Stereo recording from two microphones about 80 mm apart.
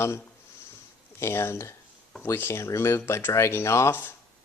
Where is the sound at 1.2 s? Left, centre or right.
Left.